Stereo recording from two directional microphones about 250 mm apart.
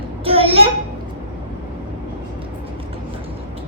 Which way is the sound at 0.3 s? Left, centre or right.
Right.